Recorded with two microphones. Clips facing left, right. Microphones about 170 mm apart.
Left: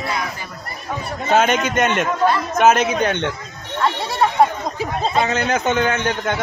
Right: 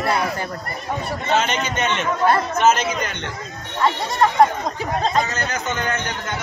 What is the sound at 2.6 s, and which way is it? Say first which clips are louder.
Speech: left 5 dB; 60° left (ahead or behind).